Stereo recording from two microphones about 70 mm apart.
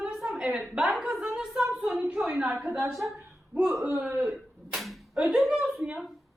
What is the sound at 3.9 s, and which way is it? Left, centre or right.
Speech, right.